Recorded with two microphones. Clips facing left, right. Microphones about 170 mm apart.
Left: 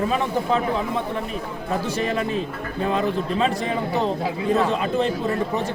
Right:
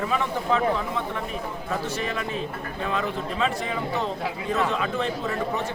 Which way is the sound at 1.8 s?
35° left (ahead or behind).